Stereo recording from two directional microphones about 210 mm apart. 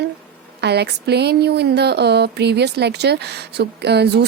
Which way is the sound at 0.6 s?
50° right (ahead or behind).